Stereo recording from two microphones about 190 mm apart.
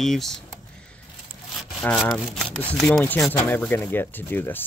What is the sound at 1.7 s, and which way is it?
Speech, centre (ahead or behind).